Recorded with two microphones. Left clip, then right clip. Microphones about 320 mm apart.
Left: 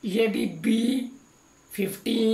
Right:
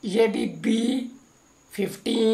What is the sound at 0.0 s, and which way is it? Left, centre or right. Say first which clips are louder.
Speech: right 3 dB; centre.